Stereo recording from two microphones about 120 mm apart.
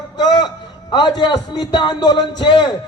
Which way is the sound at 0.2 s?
35° left (ahead or behind).